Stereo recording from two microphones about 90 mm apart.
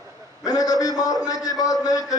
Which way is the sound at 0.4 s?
45° left (ahead or behind).